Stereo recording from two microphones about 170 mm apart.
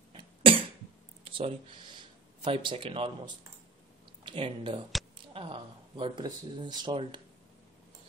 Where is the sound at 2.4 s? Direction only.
30° right (ahead or behind).